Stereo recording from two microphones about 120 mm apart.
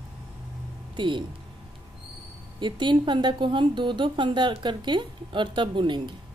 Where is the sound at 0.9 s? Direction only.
40° right (ahead or behind).